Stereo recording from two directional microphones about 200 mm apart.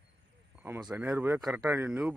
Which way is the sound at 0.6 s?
10° right (ahead or behind).